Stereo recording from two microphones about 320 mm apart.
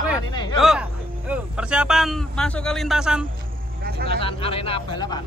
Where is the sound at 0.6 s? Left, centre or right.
Centre.